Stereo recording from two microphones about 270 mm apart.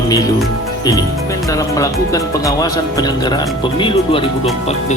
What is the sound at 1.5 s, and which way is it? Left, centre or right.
Speech, centre.